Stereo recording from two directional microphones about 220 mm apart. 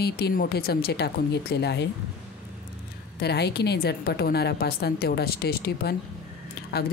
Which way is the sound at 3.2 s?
50° left (ahead or behind).